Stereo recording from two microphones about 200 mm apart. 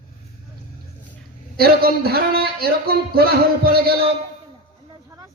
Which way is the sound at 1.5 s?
50° right (ahead or behind).